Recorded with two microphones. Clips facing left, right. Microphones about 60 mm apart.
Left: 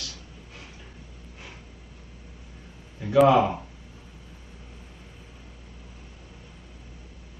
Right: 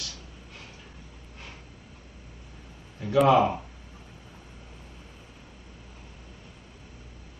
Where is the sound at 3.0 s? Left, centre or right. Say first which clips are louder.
Left 2 dB; centre.